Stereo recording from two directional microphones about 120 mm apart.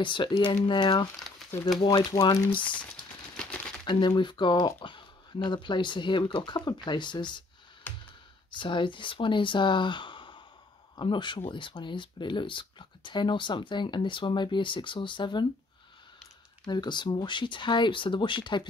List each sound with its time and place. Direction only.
0.0 s speech: 40° left (ahead or behind)
1.4 s crumpling: centre (ahead or behind)
1.9 s speech: 35° left (ahead or behind)
3.8 s speech: 40° left (ahead or behind)
8.5 s speech: 45° left (ahead or behind)
16.6 s speech: 40° left (ahead or behind)